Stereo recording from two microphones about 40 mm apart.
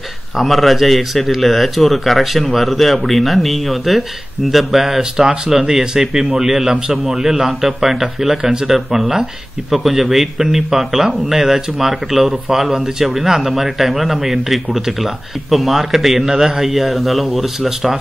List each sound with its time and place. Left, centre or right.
0.4 s a man's voice: centre